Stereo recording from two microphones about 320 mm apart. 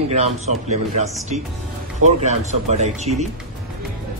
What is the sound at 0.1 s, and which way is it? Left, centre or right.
Speech, right.